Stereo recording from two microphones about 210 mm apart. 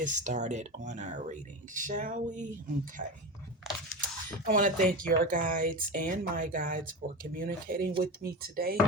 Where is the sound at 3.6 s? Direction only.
Centre (ahead or behind).